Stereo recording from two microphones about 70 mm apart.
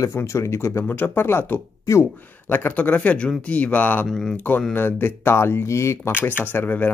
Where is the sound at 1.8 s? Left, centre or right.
Left.